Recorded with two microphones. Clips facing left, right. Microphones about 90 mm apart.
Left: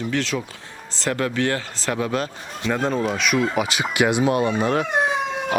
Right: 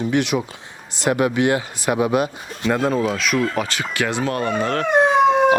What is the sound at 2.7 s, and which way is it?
Speech, 5° right (ahead or behind).